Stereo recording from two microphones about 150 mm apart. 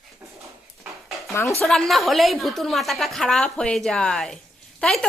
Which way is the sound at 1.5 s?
5° left (ahead or behind).